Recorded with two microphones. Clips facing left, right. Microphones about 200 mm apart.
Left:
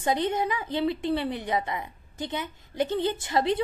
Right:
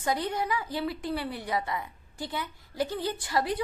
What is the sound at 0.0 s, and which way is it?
A woman's voice, 25° left (ahead or behind).